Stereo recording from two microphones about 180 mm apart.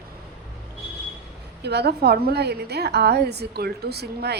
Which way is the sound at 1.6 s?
65° right (ahead or behind).